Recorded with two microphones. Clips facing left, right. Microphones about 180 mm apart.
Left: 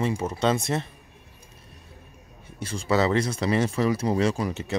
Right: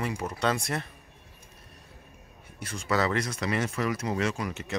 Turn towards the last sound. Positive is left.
turn(degrees=30)  # may be behind; listen again after turning